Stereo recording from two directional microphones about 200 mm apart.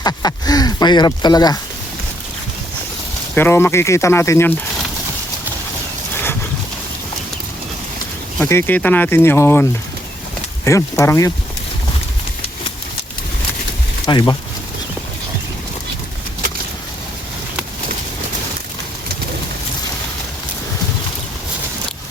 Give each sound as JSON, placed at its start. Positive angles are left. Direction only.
{"t": 0.0, "sound": "speech", "side_deg": 20}
{"t": 3.3, "sound": "speech", "side_deg": 10}
{"t": 8.4, "sound": "speech", "side_deg": 10}
{"t": 14.1, "sound": "speech", "side_deg": 25}